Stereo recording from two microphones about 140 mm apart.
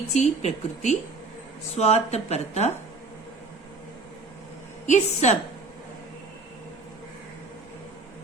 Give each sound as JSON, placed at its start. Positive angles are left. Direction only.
{"t": 0.1, "sound": "speech", "side_deg": 55}
{"t": 4.9, "sound": "speech", "side_deg": 55}